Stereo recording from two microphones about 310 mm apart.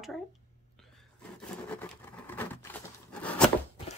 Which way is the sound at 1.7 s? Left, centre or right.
Centre.